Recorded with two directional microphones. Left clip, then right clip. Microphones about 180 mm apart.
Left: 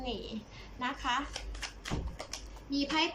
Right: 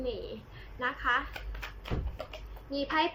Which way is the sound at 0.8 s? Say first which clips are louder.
Right 4 dB; 20° left (ahead or behind).